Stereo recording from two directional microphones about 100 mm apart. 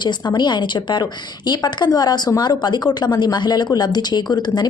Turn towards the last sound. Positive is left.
turn(degrees=45)  # may be behind; listen again after turning